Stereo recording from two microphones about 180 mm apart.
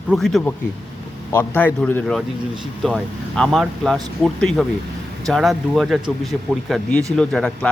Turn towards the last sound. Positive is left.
turn(degrees=5)  # may be behind; listen again after turning